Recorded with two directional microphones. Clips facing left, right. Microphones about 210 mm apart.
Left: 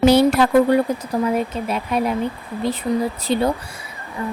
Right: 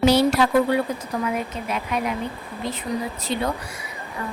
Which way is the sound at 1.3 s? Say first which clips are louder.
Left 5 dB; 35° left (ahead or behind).